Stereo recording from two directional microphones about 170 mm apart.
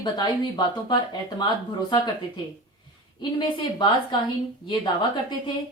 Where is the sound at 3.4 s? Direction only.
25° left (ahead or behind).